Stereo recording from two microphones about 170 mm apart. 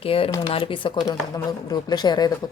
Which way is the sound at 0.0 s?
35° left (ahead or behind).